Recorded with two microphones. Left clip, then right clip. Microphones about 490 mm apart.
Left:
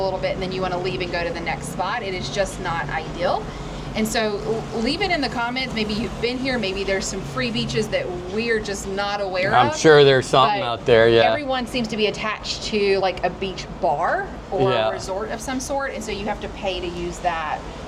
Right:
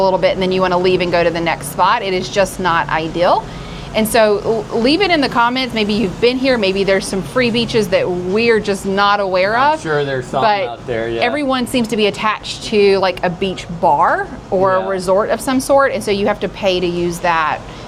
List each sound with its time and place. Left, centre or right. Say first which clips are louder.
0.0 s speech: right 10 dB; right
9.8 s speech: left 5 dB; left
11.2 s a woman's voice: right 2 dB; right
14.9 s a woman's voice: right 12 dB; right